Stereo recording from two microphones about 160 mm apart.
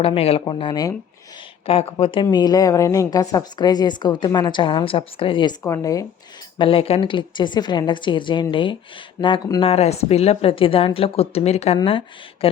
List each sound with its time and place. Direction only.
0.0 s a woman's voice: 35° left (ahead or behind)
1.6 s a woman's voice: 35° left (ahead or behind); by 6.1 s 20° left (ahead or behind)
6.6 s a woman's voice: 35° left (ahead or behind)
9.6 s a woman's voice: 40° left (ahead or behind)